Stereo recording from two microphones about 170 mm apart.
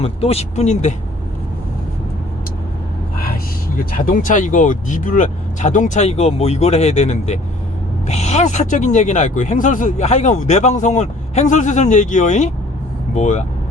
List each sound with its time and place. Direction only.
0.0 s speech: 35° left (ahead or behind)
3.9 s speech: 50° left (ahead or behind)